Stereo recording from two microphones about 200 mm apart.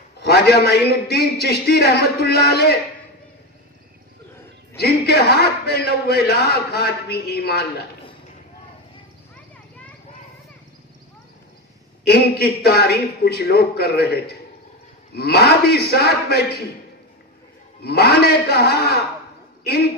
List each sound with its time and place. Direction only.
0.2 s a man's voice: 55° left (ahead or behind)
4.7 s a man's voice: 50° left (ahead or behind)
12.1 s a man's voice: 50° left (ahead or behind)
17.8 s a man's voice: 50° left (ahead or behind)